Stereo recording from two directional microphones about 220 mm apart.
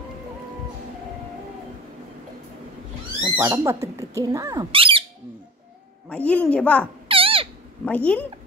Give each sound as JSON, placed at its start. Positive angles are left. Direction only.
{"t": 3.2, "sound": "speech", "side_deg": -10}
{"t": 6.0, "sound": "a woman's voice", "side_deg": 5}
{"t": 7.1, "sound": "a sound", "side_deg": -25}
{"t": 7.8, "sound": "speech", "side_deg": 5}